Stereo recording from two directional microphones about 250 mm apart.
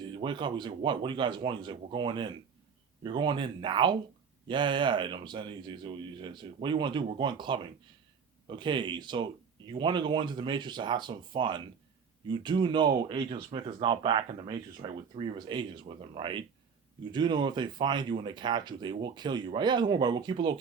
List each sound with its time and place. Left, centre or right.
0.0 s speech: centre